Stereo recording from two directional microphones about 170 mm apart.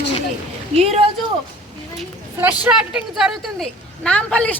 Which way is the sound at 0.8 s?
40° right (ahead or behind).